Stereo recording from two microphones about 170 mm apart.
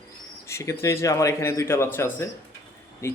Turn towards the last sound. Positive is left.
turn(degrees=15)  # may be behind; listen again after turning